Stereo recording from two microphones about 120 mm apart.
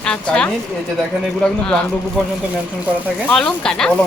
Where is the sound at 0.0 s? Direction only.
5° left (ahead or behind).